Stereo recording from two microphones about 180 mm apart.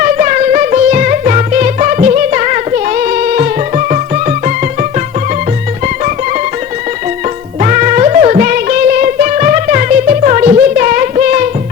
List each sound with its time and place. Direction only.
0.0 s music: 40° right (ahead or behind)
7.6 s music: 40° right (ahead or behind)